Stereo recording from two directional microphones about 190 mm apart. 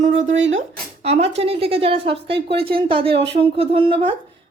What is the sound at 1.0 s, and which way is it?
A woman's voice, 35° right (ahead or behind).